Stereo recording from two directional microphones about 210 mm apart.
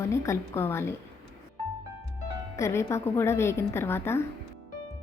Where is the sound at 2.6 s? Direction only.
15° left (ahead or behind).